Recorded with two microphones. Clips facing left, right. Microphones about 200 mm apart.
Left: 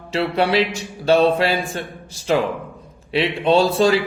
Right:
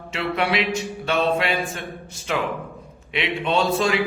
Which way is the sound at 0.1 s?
35° left (ahead or behind).